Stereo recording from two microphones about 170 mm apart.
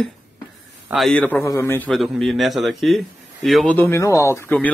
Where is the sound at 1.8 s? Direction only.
Centre (ahead or behind).